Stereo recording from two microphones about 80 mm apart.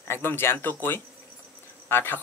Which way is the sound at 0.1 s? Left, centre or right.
Left.